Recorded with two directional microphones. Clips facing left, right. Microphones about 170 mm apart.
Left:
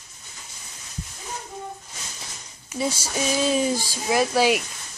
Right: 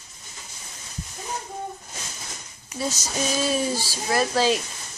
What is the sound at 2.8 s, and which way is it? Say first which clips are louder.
Speech: left 2 dB; 10° left (ahead or behind).